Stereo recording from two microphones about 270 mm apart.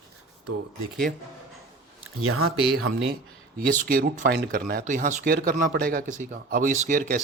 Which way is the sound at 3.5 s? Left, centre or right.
Right.